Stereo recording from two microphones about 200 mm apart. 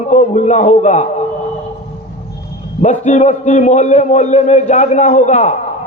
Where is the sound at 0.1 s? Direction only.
35° left (ahead or behind).